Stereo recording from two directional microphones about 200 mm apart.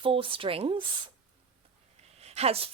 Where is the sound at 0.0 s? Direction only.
25° right (ahead or behind).